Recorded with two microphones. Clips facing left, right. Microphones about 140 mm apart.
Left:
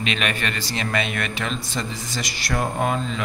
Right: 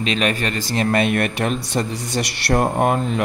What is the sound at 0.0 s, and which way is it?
Speech, 35° right (ahead or behind).